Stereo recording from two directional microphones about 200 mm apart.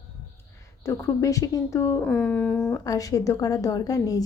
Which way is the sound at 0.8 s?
15° left (ahead or behind).